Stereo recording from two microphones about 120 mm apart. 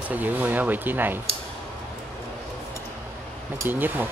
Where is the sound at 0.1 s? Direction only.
15° right (ahead or behind).